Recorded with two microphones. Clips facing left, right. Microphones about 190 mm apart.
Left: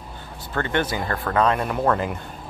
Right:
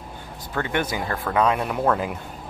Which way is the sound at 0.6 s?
10° right (ahead or behind).